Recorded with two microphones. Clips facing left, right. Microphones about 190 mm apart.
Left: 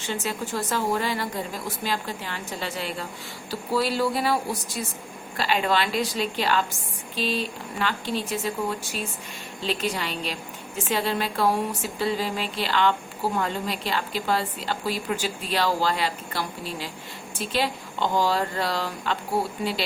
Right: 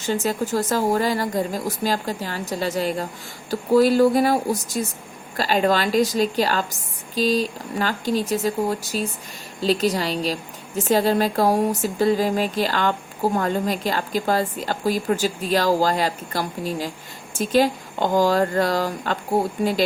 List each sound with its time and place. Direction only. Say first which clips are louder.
0.0 s speech: right 7 dB; 40° right (ahead or behind)